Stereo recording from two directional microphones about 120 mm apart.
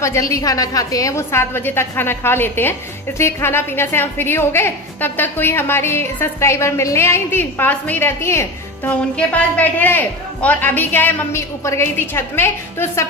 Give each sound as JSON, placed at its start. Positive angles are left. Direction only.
{"t": 0.0, "sound": "a woman's voice", "side_deg": 25}